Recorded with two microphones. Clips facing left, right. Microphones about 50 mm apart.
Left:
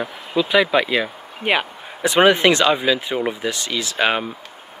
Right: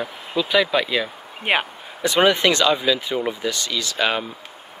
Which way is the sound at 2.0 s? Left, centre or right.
Centre.